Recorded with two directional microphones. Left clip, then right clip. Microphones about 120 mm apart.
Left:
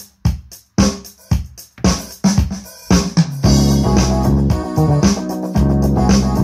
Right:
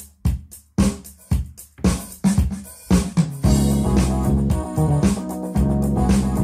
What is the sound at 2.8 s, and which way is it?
Music, 25° left (ahead or behind).